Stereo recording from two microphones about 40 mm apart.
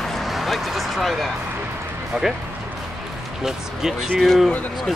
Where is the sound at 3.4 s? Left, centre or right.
Centre.